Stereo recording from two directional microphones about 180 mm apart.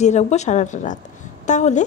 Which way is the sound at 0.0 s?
40° left (ahead or behind).